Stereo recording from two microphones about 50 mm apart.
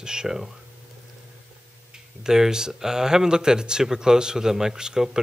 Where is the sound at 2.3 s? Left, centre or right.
Centre.